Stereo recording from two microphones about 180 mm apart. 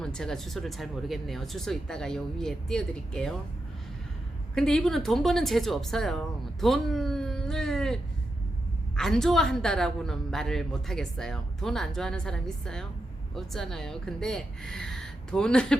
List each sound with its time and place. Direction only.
0.0 s a woman's voice: 5° left (ahead or behind)
4.5 s a woman's voice: 5° left (ahead or behind)
9.0 s a woman's voice: 5° left (ahead or behind)